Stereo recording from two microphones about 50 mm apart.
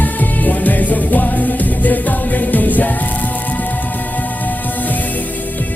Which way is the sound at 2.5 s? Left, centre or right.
Left.